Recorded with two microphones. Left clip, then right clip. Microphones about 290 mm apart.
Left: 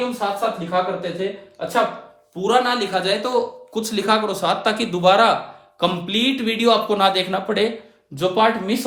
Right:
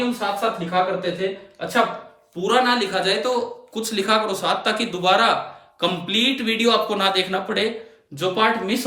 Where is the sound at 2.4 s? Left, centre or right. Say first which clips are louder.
Even; centre.